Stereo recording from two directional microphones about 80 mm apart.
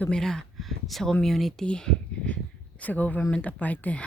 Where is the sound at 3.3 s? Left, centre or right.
Centre.